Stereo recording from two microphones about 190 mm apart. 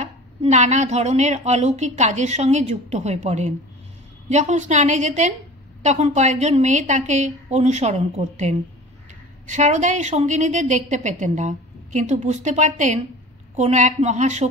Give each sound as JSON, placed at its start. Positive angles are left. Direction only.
{"t": 0.0, "sound": "a woman's voice", "side_deg": -35}